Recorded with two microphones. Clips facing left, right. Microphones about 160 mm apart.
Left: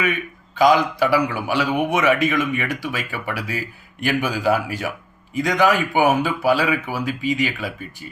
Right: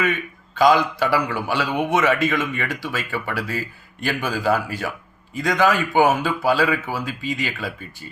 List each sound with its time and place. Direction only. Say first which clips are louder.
0.5 s a man's voice: left 1 dB; 15° left (ahead or behind)